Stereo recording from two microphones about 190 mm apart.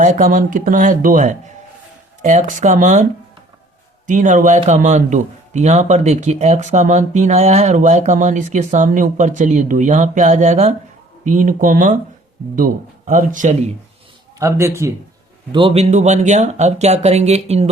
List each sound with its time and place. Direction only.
0.0 s a man's voice: 45° right (ahead or behind)
14.3 s a man's voice: 15° right (ahead or behind)
15.5 s a man's voice: 30° right (ahead or behind)